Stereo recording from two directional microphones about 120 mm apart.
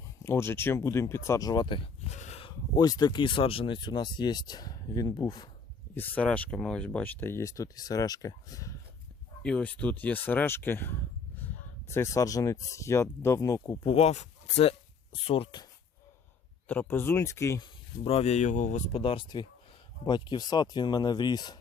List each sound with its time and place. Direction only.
0.2 s speech: 20° left (ahead or behind); by 1.9 s 40° left (ahead or behind)
2.0 s a sound: 75° left (ahead or behind)
2.7 s speech: 30° left (ahead or behind)
5.9 s speech: 15° left (ahead or behind)
9.4 s speech: 10° left (ahead or behind); by 13.7 s 30° left (ahead or behind)
13.8 s speech: 55° left (ahead or behind)
16.6 s speech: 15° left (ahead or behind)
17.6 s speech: 50° left (ahead or behind); by 18.9 s 90° left
18.9 s speech: 50° left (ahead or behind); by 21.6 s 35° left (ahead or behind)